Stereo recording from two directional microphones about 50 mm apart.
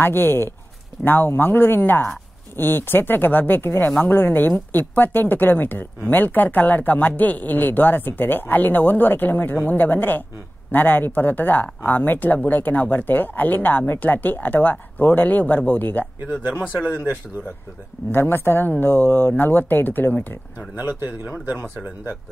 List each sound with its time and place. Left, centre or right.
0.0 s speech: left
16.8 s speech: right
18.1 s speech: left
20.7 s speech: right